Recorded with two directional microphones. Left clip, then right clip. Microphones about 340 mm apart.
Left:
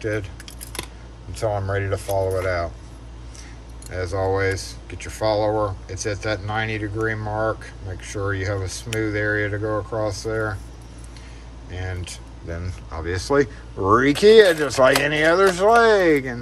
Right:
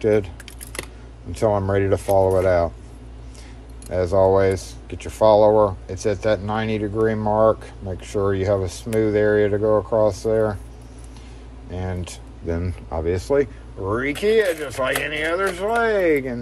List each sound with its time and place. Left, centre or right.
0.0 s speech: centre
1.3 s speech: centre
3.9 s speech: centre
11.7 s speech: centre